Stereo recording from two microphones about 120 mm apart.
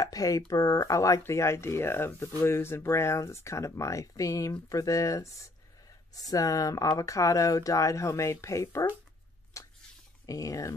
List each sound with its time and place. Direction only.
0.0 s speech: 30° left (ahead or behind)
9.6 s a sound: 25° left (ahead or behind)
10.2 s speech: 30° left (ahead or behind)